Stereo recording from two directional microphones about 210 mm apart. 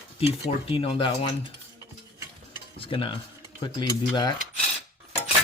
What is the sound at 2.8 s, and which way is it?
Stir, 25° left (ahead or behind).